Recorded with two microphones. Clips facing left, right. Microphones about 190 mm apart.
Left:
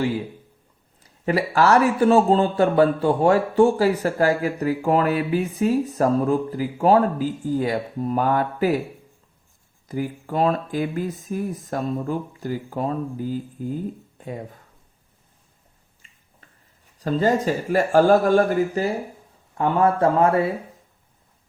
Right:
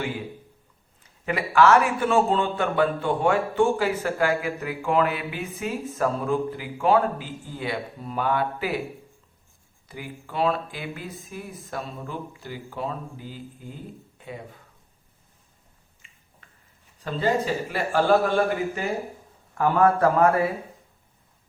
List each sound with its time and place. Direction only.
1.0 s a man's voice: 35° left (ahead or behind)
9.9 s speech: 45° left (ahead or behind)
16.0 s a sound: 40° left (ahead or behind)
17.0 s speech: 40° left (ahead or behind)
19.5 s speech: 25° left (ahead or behind)